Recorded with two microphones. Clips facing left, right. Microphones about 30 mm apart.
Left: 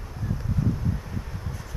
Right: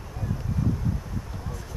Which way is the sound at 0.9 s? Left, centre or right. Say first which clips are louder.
Even; centre.